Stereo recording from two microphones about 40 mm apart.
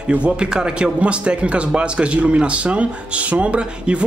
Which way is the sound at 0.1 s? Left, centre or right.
Right.